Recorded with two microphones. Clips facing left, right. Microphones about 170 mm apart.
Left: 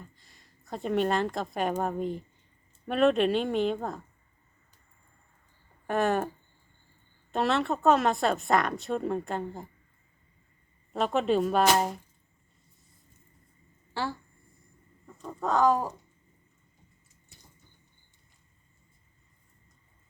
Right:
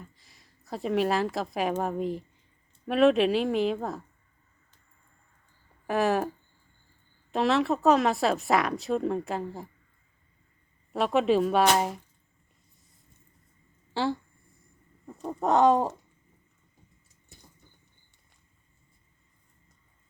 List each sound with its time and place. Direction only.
0.2 s a woman's voice: centre (ahead or behind)
5.9 s speech: centre (ahead or behind)
10.9 s speech: centre (ahead or behind)
13.9 s speech: 15° right (ahead or behind)
15.0 s a sound: 35° right (ahead or behind)
15.4 s speech: 20° right (ahead or behind)